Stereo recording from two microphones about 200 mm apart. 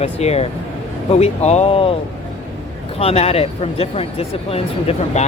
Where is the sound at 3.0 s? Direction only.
30° left (ahead or behind).